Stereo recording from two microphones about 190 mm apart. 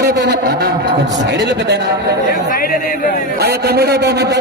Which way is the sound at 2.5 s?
50° left (ahead or behind).